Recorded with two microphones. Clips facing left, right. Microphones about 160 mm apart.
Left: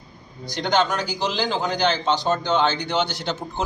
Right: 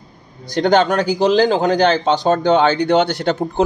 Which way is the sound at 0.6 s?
55° right (ahead or behind).